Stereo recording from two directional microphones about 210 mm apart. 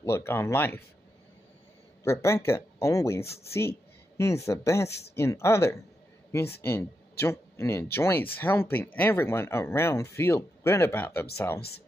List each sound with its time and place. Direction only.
0.1 s speech: 10° left (ahead or behind)
2.0 s speech: 15° left (ahead or behind)